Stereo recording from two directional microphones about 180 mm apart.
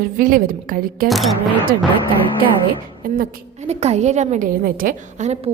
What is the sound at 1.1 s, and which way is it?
Speech, centre (ahead or behind).